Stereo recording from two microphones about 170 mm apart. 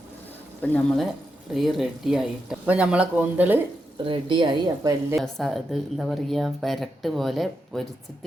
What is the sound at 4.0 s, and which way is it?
Speech, 30° right (ahead or behind).